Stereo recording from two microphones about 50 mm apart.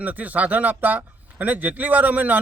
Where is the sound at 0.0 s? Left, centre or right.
Right.